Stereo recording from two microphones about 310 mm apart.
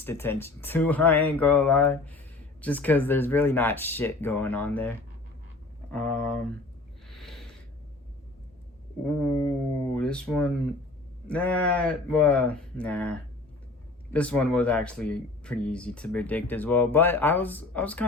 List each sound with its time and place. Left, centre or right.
0.0 s speech: centre
7.2 s a sound: centre
9.4 s speech: centre